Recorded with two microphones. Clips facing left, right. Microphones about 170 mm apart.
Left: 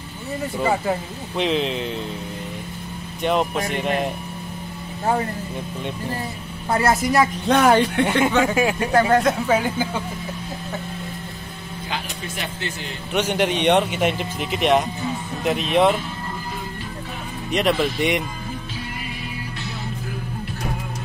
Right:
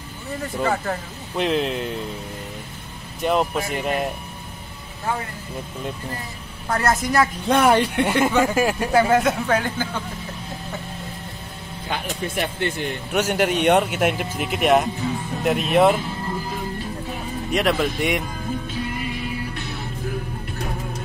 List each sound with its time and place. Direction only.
0.4 s speech: 10° left (ahead or behind)
3.2 s speech: centre (ahead or behind)
6.7 s speech: 5° left (ahead or behind)
12.4 s speech: 55° right (ahead or behind)
13.1 s speech: 5° right (ahead or behind)
17.5 s speech: 5° right (ahead or behind)